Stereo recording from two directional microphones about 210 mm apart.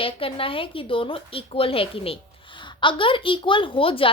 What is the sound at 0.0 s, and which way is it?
A woman's voice, 25° left (ahead or behind).